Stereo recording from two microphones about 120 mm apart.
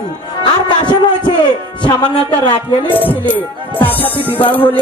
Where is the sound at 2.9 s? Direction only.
15° left (ahead or behind).